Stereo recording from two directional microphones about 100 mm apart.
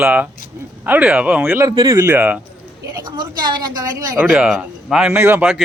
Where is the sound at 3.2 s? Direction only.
45° right (ahead or behind).